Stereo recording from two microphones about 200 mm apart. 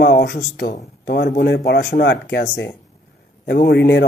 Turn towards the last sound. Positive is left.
turn(degrees=55)  # may be behind; listen again after turning